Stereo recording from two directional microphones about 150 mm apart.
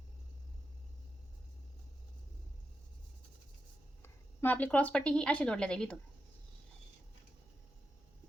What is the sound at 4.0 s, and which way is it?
A woman's voice, 10° left (ahead or behind).